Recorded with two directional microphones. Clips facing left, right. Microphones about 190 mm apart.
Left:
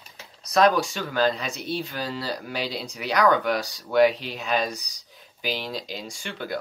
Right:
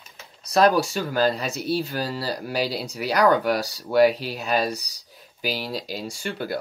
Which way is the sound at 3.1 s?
35° right (ahead or behind).